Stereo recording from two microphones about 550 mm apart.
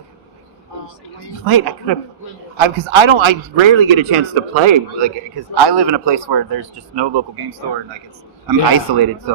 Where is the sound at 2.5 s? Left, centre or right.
Right.